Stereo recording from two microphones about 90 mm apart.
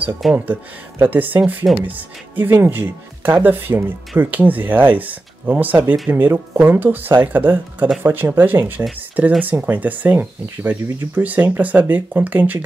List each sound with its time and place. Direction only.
0.2 s speech: centre (ahead or behind)
0.9 s speech: 20° right (ahead or behind)